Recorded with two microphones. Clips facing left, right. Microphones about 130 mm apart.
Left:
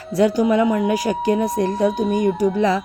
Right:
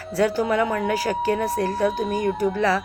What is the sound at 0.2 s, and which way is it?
Speech, 15° left (ahead or behind).